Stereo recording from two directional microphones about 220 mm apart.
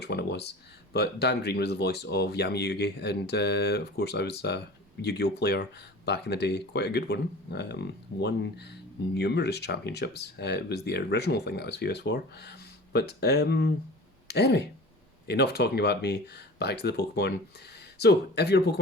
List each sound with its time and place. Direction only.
0.0 s speech: 50° left (ahead or behind)